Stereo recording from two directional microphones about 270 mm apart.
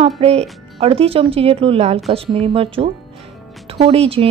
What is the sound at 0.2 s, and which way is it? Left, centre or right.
A woman's voice, right.